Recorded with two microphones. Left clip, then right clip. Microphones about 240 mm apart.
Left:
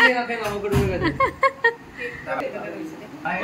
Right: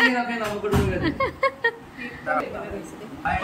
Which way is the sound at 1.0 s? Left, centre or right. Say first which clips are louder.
Left 3 dB; centre.